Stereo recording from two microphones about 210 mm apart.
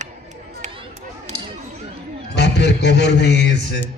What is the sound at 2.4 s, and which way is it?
A man's voice, 55° left (ahead or behind).